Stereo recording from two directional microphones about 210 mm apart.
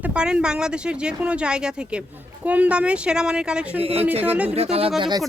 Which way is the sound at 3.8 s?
30° right (ahead or behind).